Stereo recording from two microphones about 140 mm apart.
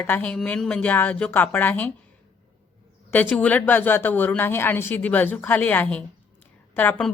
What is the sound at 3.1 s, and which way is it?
A woman's voice, 10° left (ahead or behind).